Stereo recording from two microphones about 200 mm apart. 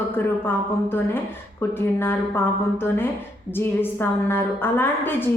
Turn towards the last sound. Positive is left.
turn(degrees=10)  # may be behind; listen again after turning